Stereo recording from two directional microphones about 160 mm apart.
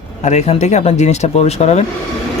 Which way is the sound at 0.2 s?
45° left (ahead or behind).